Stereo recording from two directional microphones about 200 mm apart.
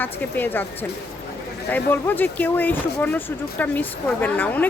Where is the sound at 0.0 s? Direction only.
10° left (ahead or behind).